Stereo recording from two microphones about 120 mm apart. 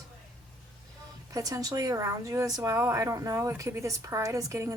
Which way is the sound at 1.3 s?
30° right (ahead or behind).